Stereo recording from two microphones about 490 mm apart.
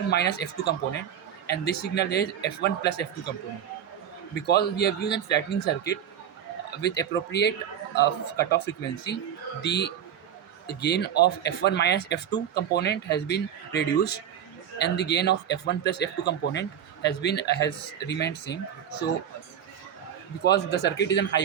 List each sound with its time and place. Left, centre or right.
0.1 s speech: centre
4.4 s speech: centre
20.4 s speech: centre